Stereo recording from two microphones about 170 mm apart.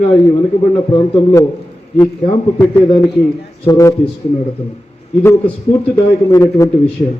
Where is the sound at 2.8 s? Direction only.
25° left (ahead or behind).